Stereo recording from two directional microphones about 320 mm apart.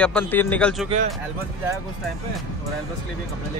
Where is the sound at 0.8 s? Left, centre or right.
Right.